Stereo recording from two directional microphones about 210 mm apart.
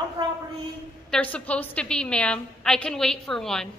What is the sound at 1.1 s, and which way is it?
A woman's voice, 5° left (ahead or behind).